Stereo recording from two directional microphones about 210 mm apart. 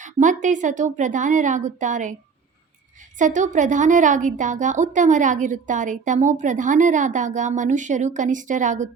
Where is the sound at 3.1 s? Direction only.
35° right (ahead or behind).